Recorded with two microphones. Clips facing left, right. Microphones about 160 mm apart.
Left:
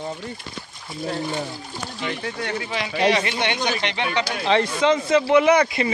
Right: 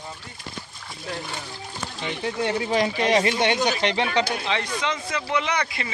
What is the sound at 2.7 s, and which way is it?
Speech, 40° right (ahead or behind).